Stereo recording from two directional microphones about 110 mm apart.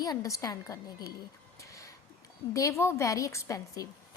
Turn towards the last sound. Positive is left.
turn(degrees=30)  # may be behind; listen again after turning